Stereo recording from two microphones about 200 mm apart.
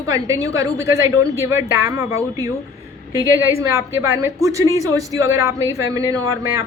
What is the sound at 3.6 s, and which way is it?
A woman's voice, 15° right (ahead or behind).